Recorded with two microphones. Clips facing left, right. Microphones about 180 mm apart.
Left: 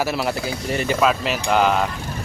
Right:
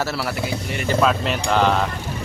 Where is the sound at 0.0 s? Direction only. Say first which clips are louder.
Left 2 dB; 15° left (ahead or behind).